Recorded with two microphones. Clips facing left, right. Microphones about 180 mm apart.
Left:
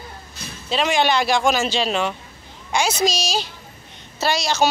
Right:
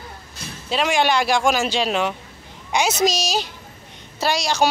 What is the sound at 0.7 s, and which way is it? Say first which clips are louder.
A woman's voice: even; 10° right (ahead or behind).